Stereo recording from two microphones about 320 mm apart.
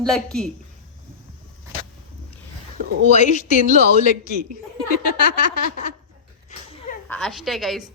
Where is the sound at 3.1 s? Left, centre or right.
Left.